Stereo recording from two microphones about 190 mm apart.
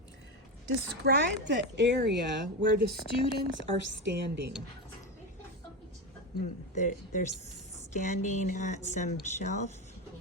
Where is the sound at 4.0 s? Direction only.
65° right (ahead or behind).